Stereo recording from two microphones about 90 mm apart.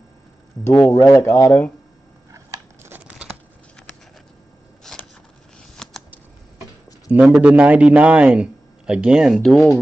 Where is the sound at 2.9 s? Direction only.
15° right (ahead or behind).